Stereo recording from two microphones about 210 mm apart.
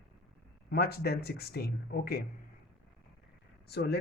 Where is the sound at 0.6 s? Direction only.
50° left (ahead or behind).